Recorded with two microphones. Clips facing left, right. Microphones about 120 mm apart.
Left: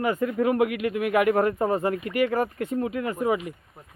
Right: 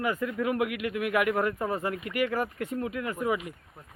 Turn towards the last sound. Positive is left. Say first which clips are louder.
# left 4 dB
turn(degrees=30)  # may be behind; listen again after turning